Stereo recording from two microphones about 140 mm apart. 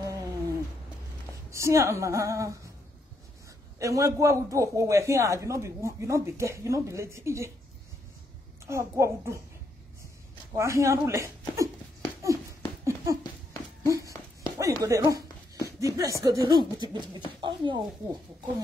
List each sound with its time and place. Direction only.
0.0 s a sound: 25° right (ahead or behind)
1.5 s a man's voice: 20° right (ahead or behind)
3.8 s a man's voice: 20° right (ahead or behind)
8.6 s a man's voice: 20° right (ahead or behind)
10.5 s a man's voice: 20° right (ahead or behind)
12.8 s a sound: 20° right (ahead or behind)
14.6 s a man's voice: 20° right (ahead or behind)